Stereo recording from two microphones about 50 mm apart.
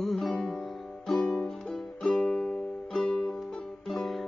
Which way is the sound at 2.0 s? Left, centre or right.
Centre.